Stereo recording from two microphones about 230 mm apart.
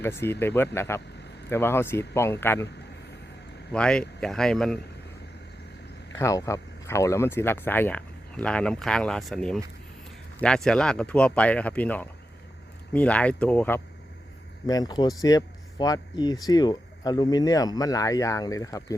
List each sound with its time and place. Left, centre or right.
0.0 s speech: centre
3.7 s speech: centre
6.1 s speech: centre